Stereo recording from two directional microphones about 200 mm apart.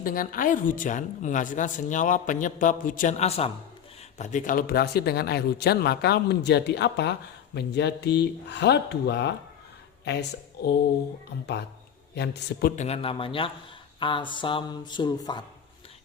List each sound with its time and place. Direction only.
0.0 s a woman's voice: 45° left (ahead or behind)
12.1 s a man's voice: 55° left (ahead or behind)
12.8 s speech: 30° left (ahead or behind)